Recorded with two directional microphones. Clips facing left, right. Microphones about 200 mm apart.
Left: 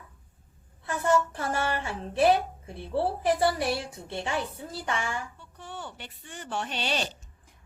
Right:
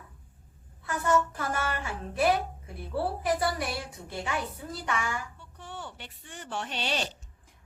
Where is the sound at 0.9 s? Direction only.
30° left (ahead or behind).